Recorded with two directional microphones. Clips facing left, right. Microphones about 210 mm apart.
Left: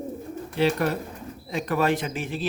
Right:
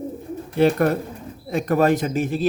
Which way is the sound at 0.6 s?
50° right (ahead or behind).